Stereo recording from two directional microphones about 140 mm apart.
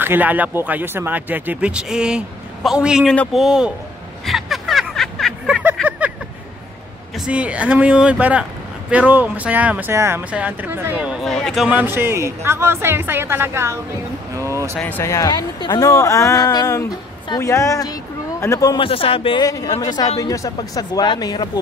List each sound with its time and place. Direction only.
0.0 s speech: 15° right (ahead or behind)
4.3 s a sound: centre (ahead or behind)
5.9 s vehicle: 10° right (ahead or behind)
7.2 s speech: 10° right (ahead or behind)
11.2 s speech: centre (ahead or behind)
11.7 s speech: 15° right (ahead or behind)
14.3 s a sound: 20° right (ahead or behind)
14.8 s speech: 15° left (ahead or behind)
18.8 s a man's voice: 40° left (ahead or behind)
19.4 s speech: 25° left (ahead or behind)